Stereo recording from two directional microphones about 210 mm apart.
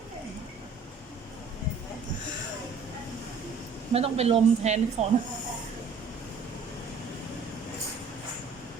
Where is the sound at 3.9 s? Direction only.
30° right (ahead or behind).